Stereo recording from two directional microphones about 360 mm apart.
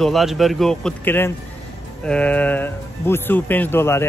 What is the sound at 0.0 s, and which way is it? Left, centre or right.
Speech, centre.